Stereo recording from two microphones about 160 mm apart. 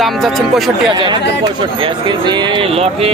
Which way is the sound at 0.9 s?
30° right (ahead or behind).